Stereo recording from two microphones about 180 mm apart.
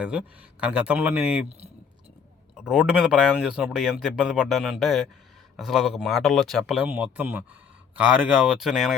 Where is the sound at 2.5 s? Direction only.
5° right (ahead or behind).